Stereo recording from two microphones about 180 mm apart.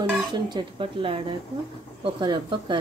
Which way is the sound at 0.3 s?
25° right (ahead or behind).